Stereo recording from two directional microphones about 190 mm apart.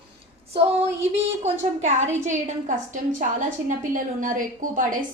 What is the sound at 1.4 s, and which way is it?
A woman's voice, 35° right (ahead or behind).